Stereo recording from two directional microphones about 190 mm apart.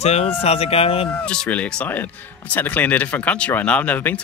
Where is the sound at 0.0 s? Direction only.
35° left (ahead or behind).